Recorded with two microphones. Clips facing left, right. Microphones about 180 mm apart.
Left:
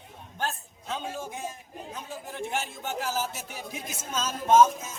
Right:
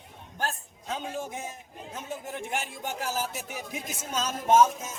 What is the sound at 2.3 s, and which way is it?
Speech, 15° right (ahead or behind).